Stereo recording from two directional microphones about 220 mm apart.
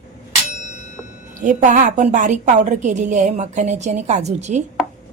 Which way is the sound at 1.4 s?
35° right (ahead or behind).